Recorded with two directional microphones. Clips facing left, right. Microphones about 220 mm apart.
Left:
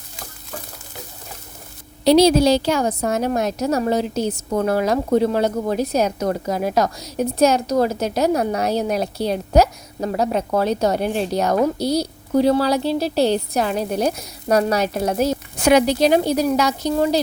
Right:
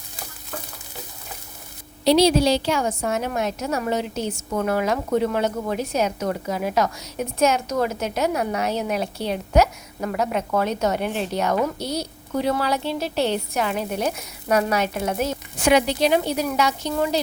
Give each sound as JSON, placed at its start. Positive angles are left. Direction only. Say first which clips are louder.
{"t": 2.0, "sound": "a woman's voice", "louder": "left 4 dB", "side_deg": 45}